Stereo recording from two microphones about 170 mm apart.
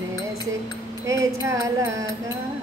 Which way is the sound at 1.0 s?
20° right (ahead or behind).